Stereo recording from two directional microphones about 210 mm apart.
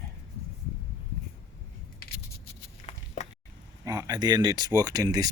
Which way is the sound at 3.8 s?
15° right (ahead or behind).